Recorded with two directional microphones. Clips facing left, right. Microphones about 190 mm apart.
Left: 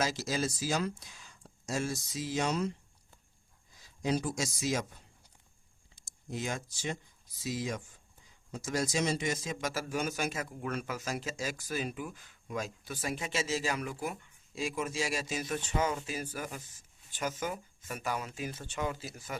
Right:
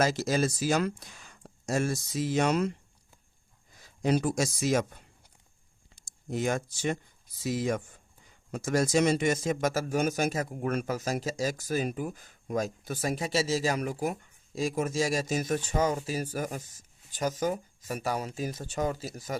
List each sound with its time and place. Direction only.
0.0 s speech: 55° right (ahead or behind)
3.8 s speech: 60° right (ahead or behind)
6.3 s speech: 55° right (ahead or behind)